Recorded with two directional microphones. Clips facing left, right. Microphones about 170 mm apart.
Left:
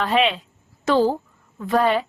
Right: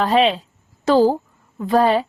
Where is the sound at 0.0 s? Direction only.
35° right (ahead or behind).